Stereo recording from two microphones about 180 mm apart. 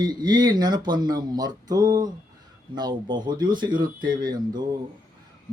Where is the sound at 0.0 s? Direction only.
25° right (ahead or behind).